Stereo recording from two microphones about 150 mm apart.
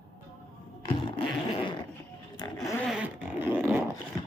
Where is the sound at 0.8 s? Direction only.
35° left (ahead or behind).